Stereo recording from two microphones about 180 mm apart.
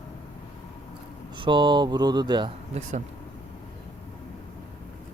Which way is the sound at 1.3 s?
25° right (ahead or behind).